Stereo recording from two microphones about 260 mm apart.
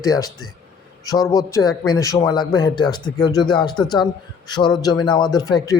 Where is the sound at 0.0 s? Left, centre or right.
Centre.